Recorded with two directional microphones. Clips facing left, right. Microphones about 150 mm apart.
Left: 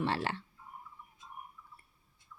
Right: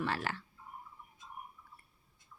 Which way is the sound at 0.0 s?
30° left (ahead or behind).